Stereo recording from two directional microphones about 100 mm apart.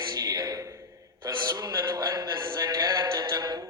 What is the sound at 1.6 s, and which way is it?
Music, 35° right (ahead or behind).